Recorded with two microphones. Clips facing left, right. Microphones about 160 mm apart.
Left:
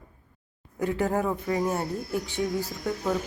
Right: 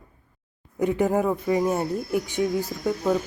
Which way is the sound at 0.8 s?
20° right (ahead or behind).